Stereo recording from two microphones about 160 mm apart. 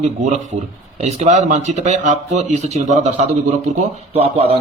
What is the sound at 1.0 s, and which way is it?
Speech, 45° right (ahead or behind).